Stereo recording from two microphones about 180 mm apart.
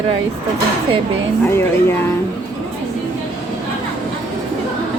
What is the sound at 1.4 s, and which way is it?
Speech, 15° left (ahead or behind).